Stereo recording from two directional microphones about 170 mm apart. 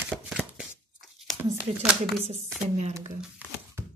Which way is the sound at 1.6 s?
10° right (ahead or behind).